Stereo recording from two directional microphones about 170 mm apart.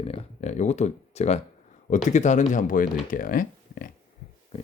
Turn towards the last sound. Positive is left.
turn(degrees=55)  # may be behind; listen again after turning